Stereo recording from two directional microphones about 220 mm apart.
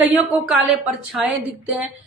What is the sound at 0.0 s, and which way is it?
A woman's voice, 5° right (ahead or behind).